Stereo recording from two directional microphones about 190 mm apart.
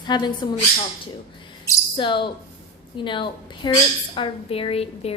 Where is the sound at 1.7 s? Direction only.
25° left (ahead or behind).